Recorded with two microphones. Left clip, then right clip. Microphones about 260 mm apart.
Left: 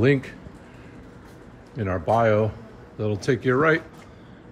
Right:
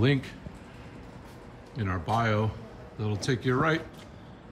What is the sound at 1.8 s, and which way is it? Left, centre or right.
Speech, centre.